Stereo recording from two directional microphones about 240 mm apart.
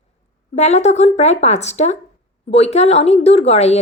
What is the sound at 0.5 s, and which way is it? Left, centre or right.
Speech, left.